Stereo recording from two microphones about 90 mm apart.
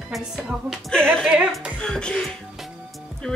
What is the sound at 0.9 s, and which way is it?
A woman's voice, 10° left (ahead or behind).